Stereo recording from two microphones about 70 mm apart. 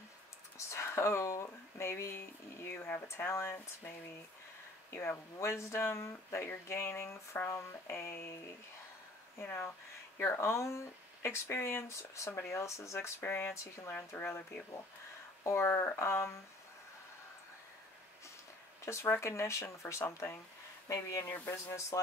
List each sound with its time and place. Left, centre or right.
0.7 s a sound: left
3.3 s speech: left
4.9 s speech: left
9.4 s speech: left
13.2 s speech: left
15.4 s speech: left
18.9 s speech: left